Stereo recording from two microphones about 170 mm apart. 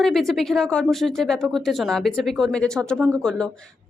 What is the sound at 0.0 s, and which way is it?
A woman's voice, centre (ahead or behind).